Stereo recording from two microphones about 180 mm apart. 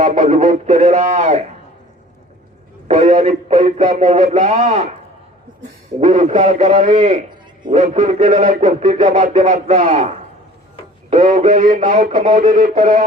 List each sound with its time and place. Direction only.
0.0 s speech: 40° right (ahead or behind)
2.8 s speech: 40° right (ahead or behind)
6.0 s speech: 40° right (ahead or behind)